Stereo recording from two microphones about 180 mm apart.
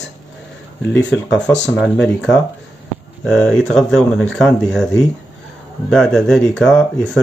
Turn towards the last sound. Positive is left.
turn(degrees=5)  # may be behind; listen again after turning